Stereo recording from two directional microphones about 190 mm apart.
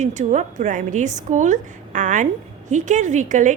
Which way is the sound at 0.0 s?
40° right (ahead or behind).